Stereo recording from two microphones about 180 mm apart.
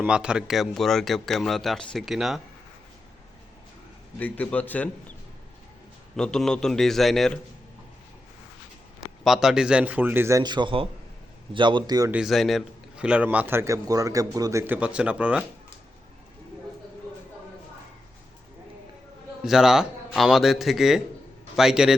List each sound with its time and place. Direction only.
0.0 s a man's voice: 5° right (ahead or behind)
4.2 s a man's voice: 10° left (ahead or behind)
6.1 s a man's voice: 5° left (ahead or behind)
9.2 s a man's voice: centre (ahead or behind); by 12.1 s 20° right (ahead or behind)
12.1 s a man's voice: centre (ahead or behind)
19.4 s a man's voice: 5° right (ahead or behind)